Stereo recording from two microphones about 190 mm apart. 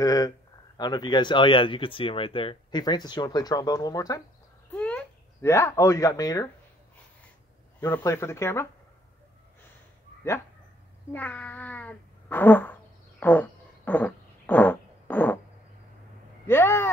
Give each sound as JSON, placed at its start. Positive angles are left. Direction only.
{"t": 0.0, "sound": "speech", "side_deg": 20}
{"t": 4.7, "sound": "speech", "side_deg": 5}
{"t": 7.8, "sound": "speech", "side_deg": 15}
{"t": 11.1, "sound": "cat", "side_deg": 10}
{"t": 13.2, "sound": "a sound", "side_deg": 10}
{"t": 16.4, "sound": "speech", "side_deg": 15}